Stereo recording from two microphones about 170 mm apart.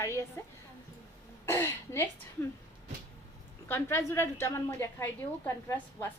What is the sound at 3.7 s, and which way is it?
A woman's voice, 15° left (ahead or behind).